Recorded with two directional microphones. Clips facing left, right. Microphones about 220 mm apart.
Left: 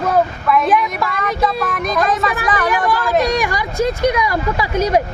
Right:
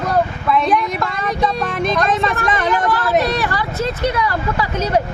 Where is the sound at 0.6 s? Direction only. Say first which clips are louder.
Left 1 dB; centre (ahead or behind).